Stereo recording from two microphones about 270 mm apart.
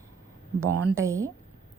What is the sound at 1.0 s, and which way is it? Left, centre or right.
Speech, centre.